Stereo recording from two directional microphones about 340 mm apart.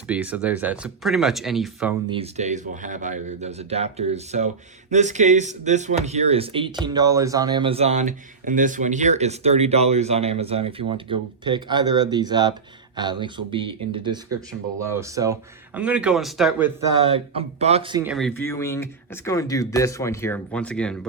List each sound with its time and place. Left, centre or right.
0.1 s speech: centre
2.0 s speech: centre
17.1 s speech: centre